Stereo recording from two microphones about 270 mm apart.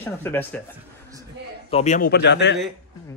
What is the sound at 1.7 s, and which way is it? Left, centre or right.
Speech, left.